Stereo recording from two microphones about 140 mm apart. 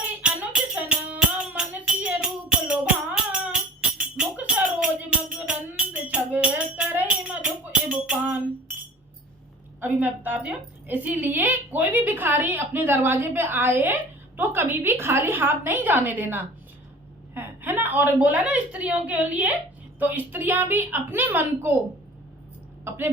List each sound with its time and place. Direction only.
0.2 s music: 10° right (ahead or behind)
4.2 s tambourine: 10° right (ahead or behind)
5.5 s music: 10° right (ahead or behind)
9.8 s a woman's voice: 15° right (ahead or behind)
22.8 s a sound: 15° right (ahead or behind)